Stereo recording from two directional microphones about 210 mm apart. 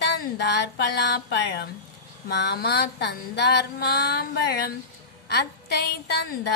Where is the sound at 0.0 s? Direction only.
55° left (ahead or behind).